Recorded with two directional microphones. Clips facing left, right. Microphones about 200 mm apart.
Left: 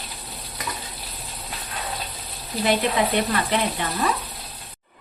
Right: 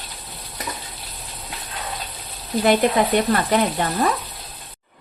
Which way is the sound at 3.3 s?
45° right (ahead or behind).